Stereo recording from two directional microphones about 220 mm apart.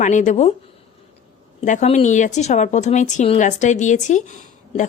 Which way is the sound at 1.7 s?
30° left (ahead or behind).